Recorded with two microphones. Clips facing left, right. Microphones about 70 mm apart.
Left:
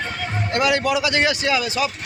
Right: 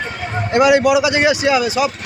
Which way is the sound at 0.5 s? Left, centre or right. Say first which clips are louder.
Right 8 dB; centre.